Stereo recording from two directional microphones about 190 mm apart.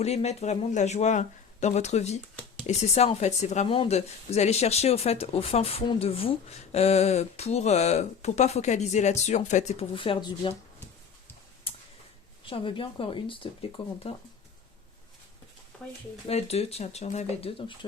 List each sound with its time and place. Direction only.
0.0 s speech: 35° left (ahead or behind)
11.7 s a sound: 30° left (ahead or behind)
12.5 s speech: 30° left (ahead or behind)
16.3 s speech: 35° left (ahead or behind)